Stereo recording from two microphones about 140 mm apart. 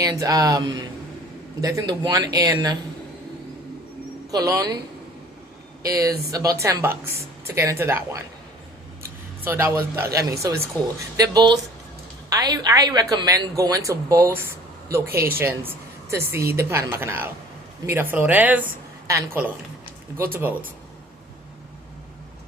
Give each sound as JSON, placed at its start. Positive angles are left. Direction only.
{"t": 0.0, "sound": "a woman's voice", "side_deg": -25}
{"t": 4.3, "sound": "a woman's voice", "side_deg": -25}
{"t": 5.8, "sound": "a woman's voice", "side_deg": -25}
{"t": 9.4, "sound": "a woman's voice", "side_deg": -15}